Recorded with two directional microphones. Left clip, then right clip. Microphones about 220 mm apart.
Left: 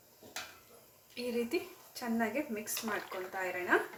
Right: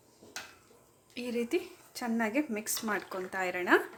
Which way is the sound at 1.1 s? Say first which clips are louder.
Right 2 dB; 30° right (ahead or behind).